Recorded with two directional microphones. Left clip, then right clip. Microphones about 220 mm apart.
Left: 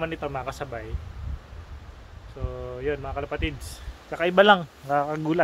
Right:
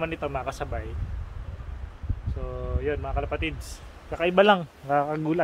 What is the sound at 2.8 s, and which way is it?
A man's voice, centre (ahead or behind).